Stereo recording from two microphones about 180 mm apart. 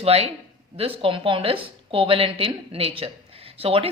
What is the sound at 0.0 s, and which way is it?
A woman's voice, 35° right (ahead or behind).